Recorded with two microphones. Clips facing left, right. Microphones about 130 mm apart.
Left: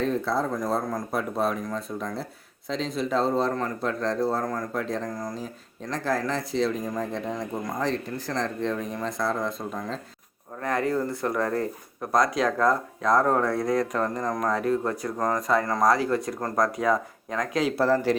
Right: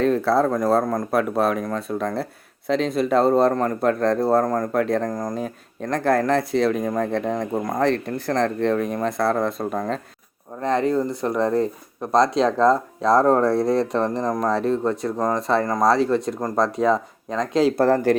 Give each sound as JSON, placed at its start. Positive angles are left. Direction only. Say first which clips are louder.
{"t": 0.0, "sound": "speech", "louder": "right 7 dB", "side_deg": -70}
{"t": 3.5, "sound": "speech", "louder": "right 7 dB", "side_deg": -45}
{"t": 10.6, "sound": "speech", "louder": "right 5 dB", "side_deg": -25}
{"t": 17.7, "sound": "speech", "louder": "right 1 dB", "side_deg": -50}